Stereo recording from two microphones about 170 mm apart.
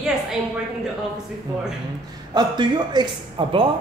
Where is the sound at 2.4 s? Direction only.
25° right (ahead or behind).